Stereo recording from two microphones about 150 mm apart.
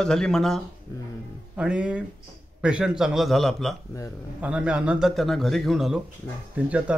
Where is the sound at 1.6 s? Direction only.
5° right (ahead or behind).